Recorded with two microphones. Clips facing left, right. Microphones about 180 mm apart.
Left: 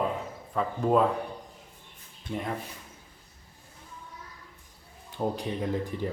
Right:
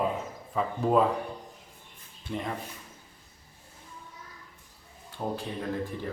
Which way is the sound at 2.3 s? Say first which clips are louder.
Left 1 dB; 5° left (ahead or behind).